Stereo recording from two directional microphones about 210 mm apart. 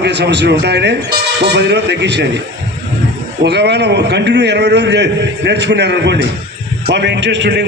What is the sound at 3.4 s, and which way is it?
A man's voice, 55° right (ahead or behind).